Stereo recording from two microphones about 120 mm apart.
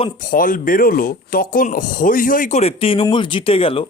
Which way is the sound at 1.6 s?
90° left.